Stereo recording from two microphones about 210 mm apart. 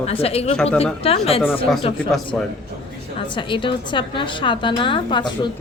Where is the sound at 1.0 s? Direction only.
30° left (ahead or behind).